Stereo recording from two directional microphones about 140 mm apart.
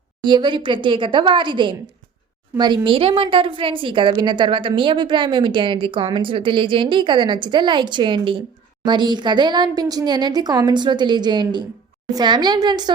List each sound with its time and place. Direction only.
0.3 s a woman's voice: 35° right (ahead or behind)